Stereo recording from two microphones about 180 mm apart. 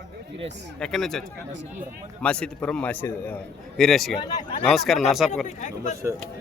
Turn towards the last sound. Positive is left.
turn(degrees=40)  # may be behind; listen again after turning